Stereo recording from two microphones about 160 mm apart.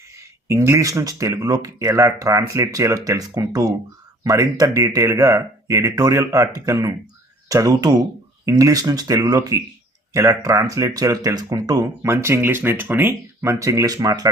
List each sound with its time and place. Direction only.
0.4 s speech: 15° right (ahead or behind)